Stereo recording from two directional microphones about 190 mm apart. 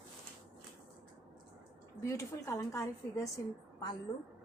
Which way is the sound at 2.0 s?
15° left (ahead or behind).